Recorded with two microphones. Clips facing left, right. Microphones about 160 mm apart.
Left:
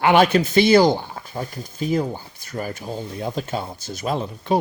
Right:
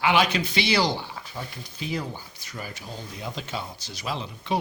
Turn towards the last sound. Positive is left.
turn(degrees=50)  # may be behind; listen again after turning